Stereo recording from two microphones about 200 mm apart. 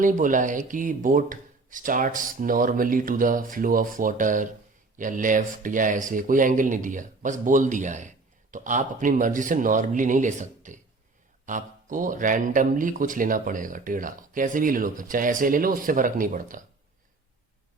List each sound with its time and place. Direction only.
0.0 s speech: 40° right (ahead or behind)